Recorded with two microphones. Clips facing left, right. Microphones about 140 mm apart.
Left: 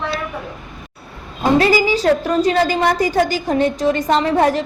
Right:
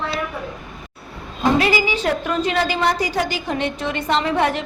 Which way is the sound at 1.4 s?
40° left (ahead or behind).